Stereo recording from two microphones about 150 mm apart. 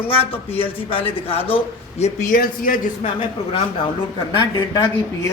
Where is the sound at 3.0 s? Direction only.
35° left (ahead or behind).